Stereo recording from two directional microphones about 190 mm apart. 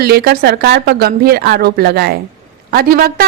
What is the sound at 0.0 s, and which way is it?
A woman's voice, 55° right (ahead or behind).